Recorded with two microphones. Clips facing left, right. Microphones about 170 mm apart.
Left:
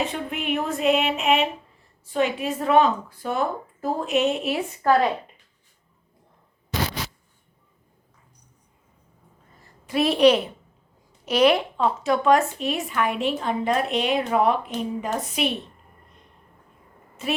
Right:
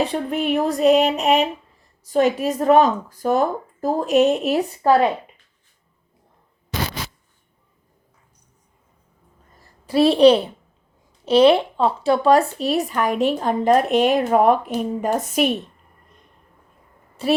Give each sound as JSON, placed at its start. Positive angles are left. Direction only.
{"t": 0.0, "sound": "speech", "side_deg": -35}
{"t": 4.8, "sound": "speech", "side_deg": -25}
{"t": 9.8, "sound": "a woman's voice", "side_deg": -30}
{"t": 17.2, "sound": "speech", "side_deg": -35}